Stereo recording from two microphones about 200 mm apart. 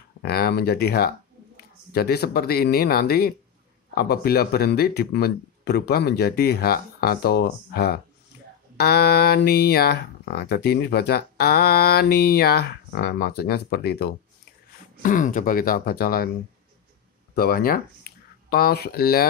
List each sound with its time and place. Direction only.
0.2 s speech: 50° left (ahead or behind)
15.0 s speech: 40° left (ahead or behind)
17.4 s speech: 50° left (ahead or behind)